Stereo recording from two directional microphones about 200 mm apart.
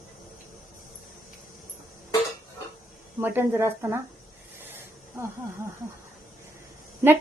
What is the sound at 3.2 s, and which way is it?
Speech, 10° right (ahead or behind).